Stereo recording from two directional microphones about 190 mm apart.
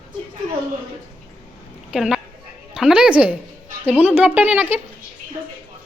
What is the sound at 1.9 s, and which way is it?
A woman's voice, 5° right (ahead or behind).